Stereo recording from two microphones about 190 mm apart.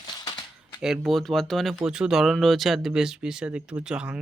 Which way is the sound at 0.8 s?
Centre (ahead or behind).